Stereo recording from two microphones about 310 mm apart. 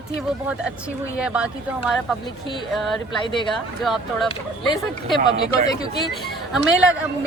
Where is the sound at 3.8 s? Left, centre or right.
Centre.